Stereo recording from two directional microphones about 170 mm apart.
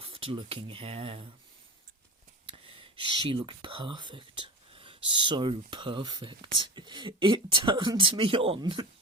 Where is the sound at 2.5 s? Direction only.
30° right (ahead or behind).